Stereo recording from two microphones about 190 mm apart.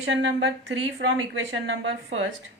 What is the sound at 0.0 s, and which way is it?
Speech, 70° right (ahead or behind).